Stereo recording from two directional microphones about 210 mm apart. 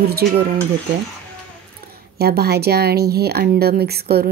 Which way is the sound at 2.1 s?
50° right (ahead or behind).